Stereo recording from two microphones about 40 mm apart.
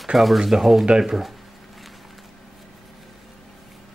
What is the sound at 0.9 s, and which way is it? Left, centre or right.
Speech, centre.